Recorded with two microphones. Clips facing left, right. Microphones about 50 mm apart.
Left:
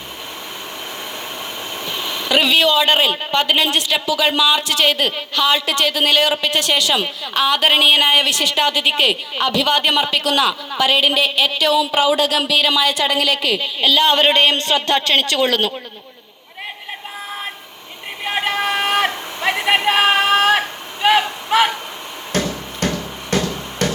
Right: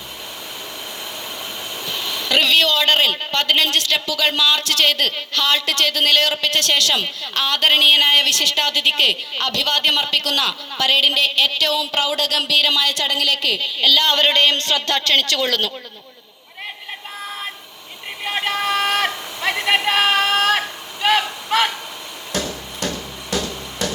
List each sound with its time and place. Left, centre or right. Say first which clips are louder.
1.8 s vehicle: left 1 dB; left
2.3 s speech: left 2 dB; centre
18.3 s a sound: left 1 dB; centre
22.3 s music: left 4 dB; left